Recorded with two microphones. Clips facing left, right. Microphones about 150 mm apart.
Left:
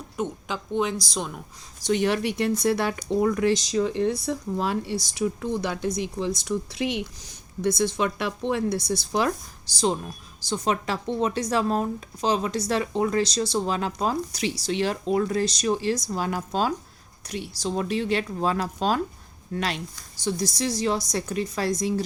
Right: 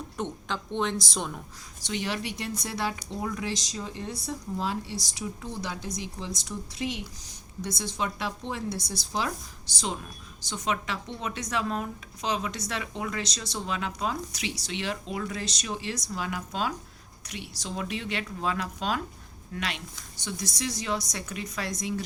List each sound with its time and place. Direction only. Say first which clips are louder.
0.2 s a woman's voice: left 4 dB; 10° left (ahead or behind)
1.8 s speech: left 9 dB; 50° left (ahead or behind)
9.7 s speech: left 9 dB; 35° left (ahead or behind)